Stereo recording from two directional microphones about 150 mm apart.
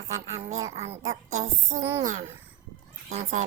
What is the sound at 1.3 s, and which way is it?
Speech, 50° right (ahead or behind).